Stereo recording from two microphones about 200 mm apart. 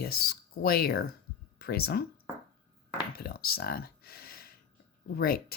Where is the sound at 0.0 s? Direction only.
50° left (ahead or behind).